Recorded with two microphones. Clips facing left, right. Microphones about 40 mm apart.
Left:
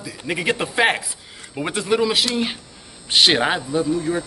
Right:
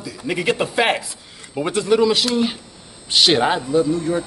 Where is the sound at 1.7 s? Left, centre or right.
Centre.